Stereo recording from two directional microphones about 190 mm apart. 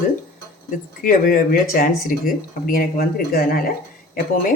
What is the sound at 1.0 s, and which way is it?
Speech, 50° left (ahead or behind).